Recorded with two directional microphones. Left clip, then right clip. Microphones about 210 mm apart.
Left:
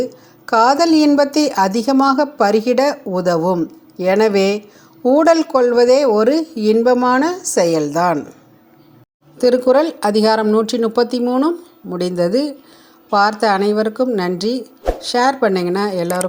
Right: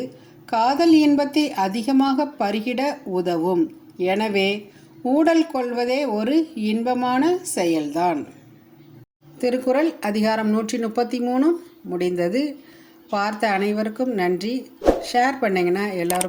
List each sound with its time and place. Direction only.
0.0 s a woman's voice: 30° left (ahead or behind)
9.4 s a woman's voice: 25° left (ahead or behind)